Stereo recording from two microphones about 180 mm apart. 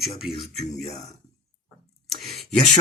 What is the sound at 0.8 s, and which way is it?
Speech, 35° left (ahead or behind).